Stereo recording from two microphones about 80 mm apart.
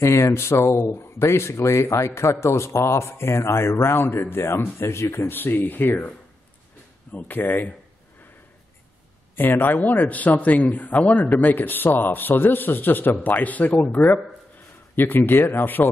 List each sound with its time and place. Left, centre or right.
0.0 s speech: left
9.3 s speech: left